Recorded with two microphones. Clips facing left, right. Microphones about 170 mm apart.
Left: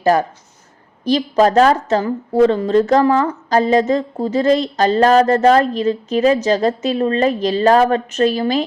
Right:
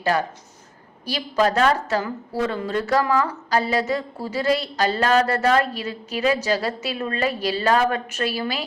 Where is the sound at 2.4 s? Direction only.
30° left (ahead or behind).